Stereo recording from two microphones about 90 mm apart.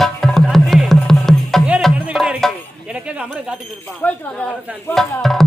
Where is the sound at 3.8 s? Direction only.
15° left (ahead or behind).